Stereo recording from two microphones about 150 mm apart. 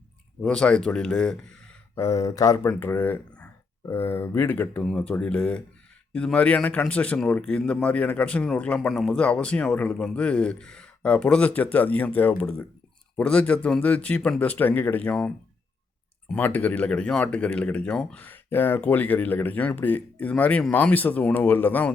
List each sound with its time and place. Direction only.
0.4 s a man's voice: 5° left (ahead or behind)
2.0 s a man's voice: 20° left (ahead or behind)
16.3 s a man's voice: 10° left (ahead or behind)